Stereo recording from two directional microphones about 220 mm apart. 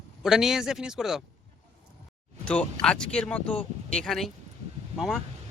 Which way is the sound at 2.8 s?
5° left (ahead or behind).